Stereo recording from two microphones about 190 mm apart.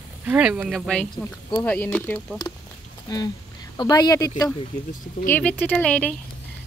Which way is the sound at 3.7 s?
20° left (ahead or behind).